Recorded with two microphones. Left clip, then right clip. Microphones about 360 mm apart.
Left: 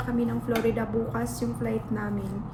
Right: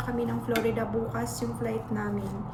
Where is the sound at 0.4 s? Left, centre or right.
Centre.